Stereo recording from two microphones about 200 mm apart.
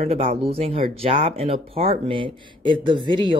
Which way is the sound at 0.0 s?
30° right (ahead or behind).